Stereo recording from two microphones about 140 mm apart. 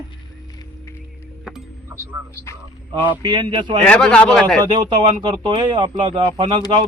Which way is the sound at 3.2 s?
35° right (ahead or behind).